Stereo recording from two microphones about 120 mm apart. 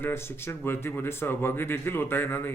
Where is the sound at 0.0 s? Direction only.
20° left (ahead or behind).